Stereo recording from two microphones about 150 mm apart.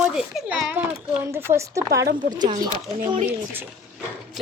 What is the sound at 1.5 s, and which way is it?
Speech, 20° right (ahead or behind).